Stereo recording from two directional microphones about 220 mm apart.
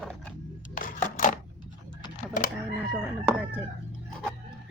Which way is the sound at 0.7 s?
35° left (ahead or behind).